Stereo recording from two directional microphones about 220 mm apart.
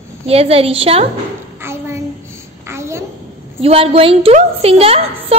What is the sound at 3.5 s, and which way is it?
A woman's voice, 25° right (ahead or behind).